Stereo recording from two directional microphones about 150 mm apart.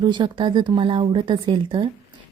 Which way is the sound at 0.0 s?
30° right (ahead or behind).